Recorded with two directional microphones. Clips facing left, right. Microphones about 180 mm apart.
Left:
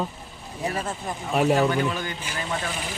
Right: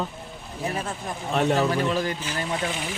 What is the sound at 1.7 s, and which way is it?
Speech, 35° right (ahead or behind).